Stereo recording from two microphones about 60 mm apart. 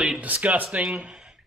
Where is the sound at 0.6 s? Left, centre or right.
Centre.